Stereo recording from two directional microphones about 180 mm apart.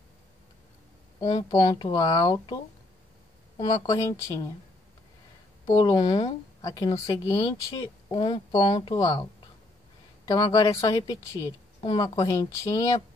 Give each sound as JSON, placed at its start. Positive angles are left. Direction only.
{"t": 1.2, "sound": "a woman's voice", "side_deg": 25}
{"t": 5.7, "sound": "a woman's voice", "side_deg": 25}
{"t": 10.2, "sound": "a woman's voice", "side_deg": 20}